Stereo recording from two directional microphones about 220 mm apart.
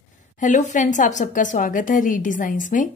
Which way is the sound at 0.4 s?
35° left (ahead or behind).